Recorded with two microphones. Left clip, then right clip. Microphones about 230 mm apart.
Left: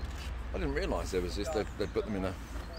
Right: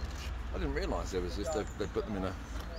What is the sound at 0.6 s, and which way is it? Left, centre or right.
Speech, left.